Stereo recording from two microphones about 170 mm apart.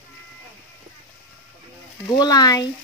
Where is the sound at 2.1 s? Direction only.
25° left (ahead or behind).